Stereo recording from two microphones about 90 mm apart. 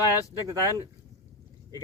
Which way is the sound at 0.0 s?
40° left (ahead or behind).